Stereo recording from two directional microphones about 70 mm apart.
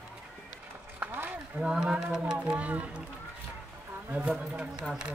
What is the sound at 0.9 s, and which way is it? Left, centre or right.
Run, right.